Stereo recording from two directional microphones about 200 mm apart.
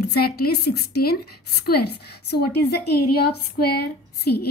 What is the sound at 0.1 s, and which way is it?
A woman's voice, 50° left (ahead or behind).